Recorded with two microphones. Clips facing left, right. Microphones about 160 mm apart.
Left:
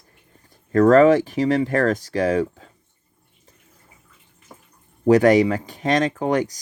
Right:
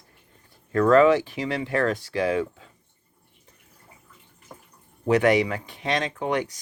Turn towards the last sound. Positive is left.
turn(degrees=40)  # may be behind; listen again after turning